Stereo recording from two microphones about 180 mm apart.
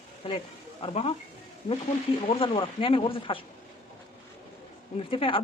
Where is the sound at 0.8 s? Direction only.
30° left (ahead or behind).